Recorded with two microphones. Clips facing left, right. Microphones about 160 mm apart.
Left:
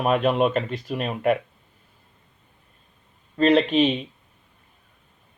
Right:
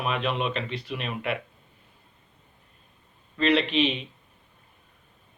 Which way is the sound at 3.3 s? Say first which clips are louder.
Left 5 dB; 45° left (ahead or behind).